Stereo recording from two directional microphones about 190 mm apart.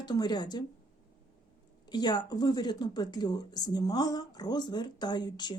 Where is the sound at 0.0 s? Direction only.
20° left (ahead or behind).